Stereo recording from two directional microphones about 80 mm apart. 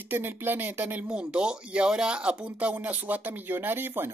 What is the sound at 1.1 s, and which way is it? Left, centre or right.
Speech, centre.